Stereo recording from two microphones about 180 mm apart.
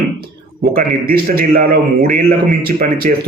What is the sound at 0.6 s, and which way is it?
A man's voice, 55° right (ahead or behind).